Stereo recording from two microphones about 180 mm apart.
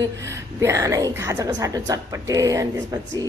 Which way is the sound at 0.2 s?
15° right (ahead or behind).